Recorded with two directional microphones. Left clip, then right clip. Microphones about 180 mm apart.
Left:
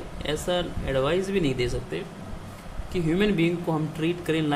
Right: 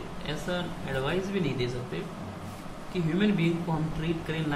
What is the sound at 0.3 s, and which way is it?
Speech, 50° left (ahead or behind).